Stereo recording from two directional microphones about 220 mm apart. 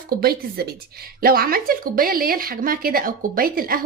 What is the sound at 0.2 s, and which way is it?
A woman's voice, 45° right (ahead or behind).